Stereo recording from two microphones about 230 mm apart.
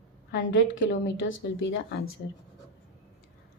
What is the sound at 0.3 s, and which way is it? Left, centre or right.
A woman's voice, left.